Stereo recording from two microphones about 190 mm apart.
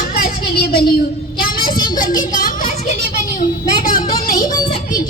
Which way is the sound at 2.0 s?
45° left (ahead or behind).